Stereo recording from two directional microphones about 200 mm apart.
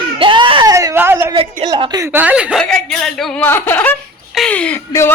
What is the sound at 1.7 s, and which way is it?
A woman's voice, 20° right (ahead or behind).